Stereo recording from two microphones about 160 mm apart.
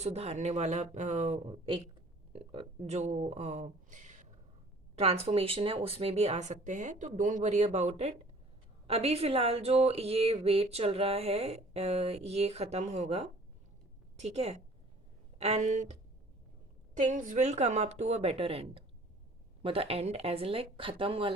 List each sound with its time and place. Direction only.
0.0 s speech: 40° right (ahead or behind)
17.1 s speech: 50° right (ahead or behind); by 21.3 s 35° right (ahead or behind)